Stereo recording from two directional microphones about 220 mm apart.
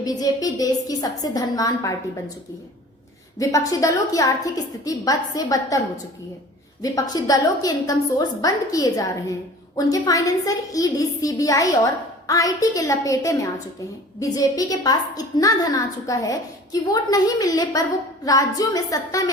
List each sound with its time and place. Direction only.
0.0 s a woman's voice: 15° left (ahead or behind)
3.7 s a woman's voice: 15° left (ahead or behind)
6.8 s a woman's voice: 15° left (ahead or behind)